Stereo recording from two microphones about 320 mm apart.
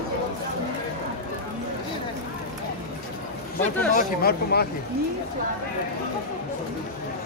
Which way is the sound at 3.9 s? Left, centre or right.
Left.